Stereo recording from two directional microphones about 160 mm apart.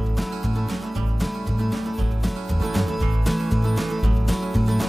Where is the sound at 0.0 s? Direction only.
Centre (ahead or behind).